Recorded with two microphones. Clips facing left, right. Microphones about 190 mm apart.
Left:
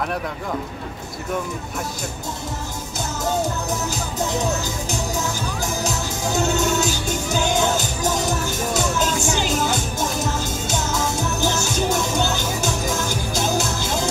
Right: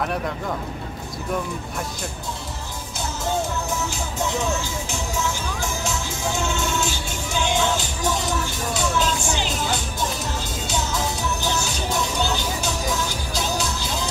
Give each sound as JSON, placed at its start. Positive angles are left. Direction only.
{"t": 4.9, "sound": "music", "side_deg": 40}